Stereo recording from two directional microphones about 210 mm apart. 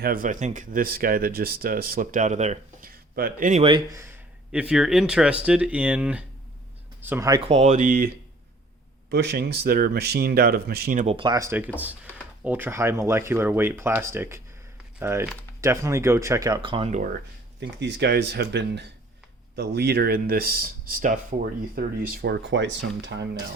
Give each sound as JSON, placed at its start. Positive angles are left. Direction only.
{"t": 0.0, "sound": "speech", "side_deg": -40}
{"t": 3.6, "sound": "speech", "side_deg": -20}
{"t": 4.5, "sound": "speech", "side_deg": -5}
{"t": 11.0, "sound": "speech", "side_deg": -25}
{"t": 17.6, "sound": "speech", "side_deg": -55}